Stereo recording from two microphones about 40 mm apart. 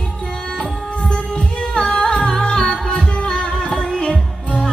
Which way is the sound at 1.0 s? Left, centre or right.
Left.